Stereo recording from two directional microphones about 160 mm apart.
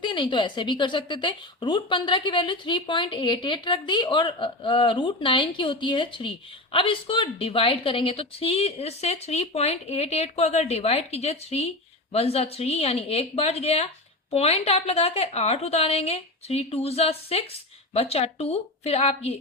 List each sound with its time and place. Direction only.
0.0 s a woman's voice: 30° left (ahead or behind)